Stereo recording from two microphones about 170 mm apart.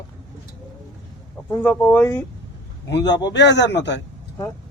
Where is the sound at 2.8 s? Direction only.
90° left.